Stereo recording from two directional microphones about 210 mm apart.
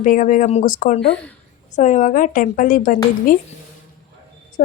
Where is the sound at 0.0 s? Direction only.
40° left (ahead or behind).